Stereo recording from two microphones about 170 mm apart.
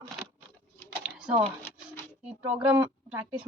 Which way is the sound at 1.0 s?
5° right (ahead or behind).